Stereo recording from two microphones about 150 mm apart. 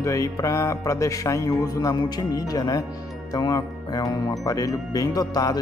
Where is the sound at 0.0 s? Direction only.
20° left (ahead or behind).